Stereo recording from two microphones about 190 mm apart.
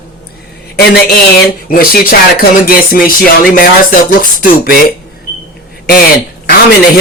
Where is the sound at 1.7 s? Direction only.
50° left (ahead or behind).